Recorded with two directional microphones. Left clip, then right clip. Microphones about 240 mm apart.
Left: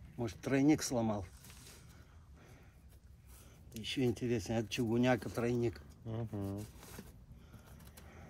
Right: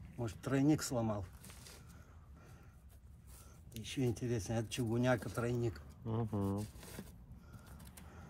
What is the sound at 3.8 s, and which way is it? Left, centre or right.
Speech, left.